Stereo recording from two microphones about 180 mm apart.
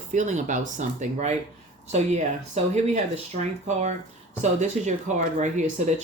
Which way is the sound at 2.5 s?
40° right (ahead or behind).